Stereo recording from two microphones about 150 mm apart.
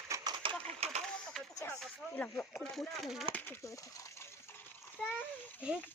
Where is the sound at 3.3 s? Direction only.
15° left (ahead or behind).